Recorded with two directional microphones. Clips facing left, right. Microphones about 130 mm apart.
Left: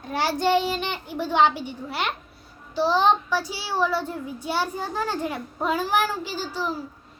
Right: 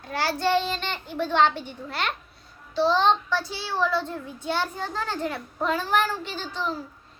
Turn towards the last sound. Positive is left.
turn(degrees=10)  # may be behind; listen again after turning